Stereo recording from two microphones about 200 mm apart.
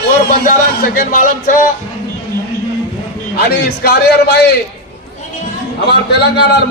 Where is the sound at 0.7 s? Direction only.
45° left (ahead or behind).